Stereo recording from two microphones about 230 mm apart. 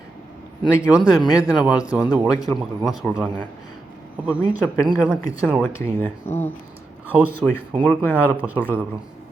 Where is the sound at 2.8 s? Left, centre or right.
Centre.